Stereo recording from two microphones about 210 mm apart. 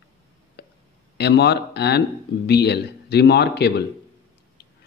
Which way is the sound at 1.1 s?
50° left (ahead or behind).